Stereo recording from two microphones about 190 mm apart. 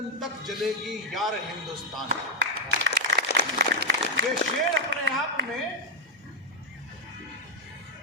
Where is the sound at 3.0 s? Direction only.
60° right (ahead or behind).